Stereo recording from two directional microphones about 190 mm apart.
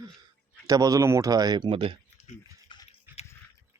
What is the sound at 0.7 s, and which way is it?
Speech, 20° right (ahead or behind).